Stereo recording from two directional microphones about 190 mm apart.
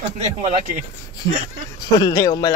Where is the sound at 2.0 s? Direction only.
20° left (ahead or behind).